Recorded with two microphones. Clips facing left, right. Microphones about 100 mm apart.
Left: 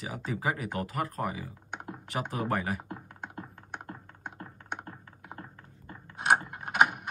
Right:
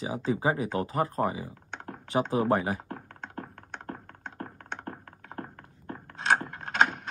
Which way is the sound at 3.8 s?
60° right (ahead or behind).